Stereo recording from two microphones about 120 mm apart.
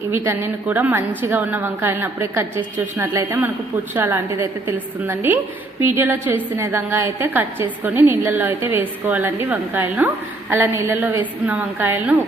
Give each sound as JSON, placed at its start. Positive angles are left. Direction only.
{"t": 0.1, "sound": "a woman's voice", "side_deg": -15}